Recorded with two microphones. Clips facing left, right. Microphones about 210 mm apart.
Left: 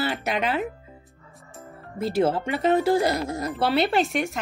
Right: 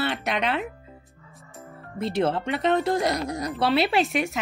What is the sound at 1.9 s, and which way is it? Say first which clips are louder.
Speech: left 2 dB; 5° left (ahead or behind).